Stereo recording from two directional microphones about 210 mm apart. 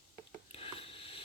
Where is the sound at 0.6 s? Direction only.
25° left (ahead or behind).